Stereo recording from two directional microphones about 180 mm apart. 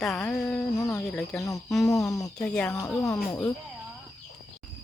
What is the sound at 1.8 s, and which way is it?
Speech, 20° left (ahead or behind).